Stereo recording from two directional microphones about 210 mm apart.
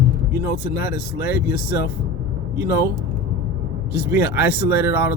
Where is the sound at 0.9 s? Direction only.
45° left (ahead or behind).